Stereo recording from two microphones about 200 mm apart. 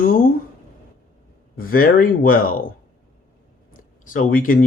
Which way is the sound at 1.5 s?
45° left (ahead or behind).